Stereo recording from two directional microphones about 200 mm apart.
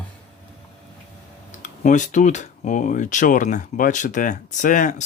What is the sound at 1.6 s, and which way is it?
Speech, 40° left (ahead or behind).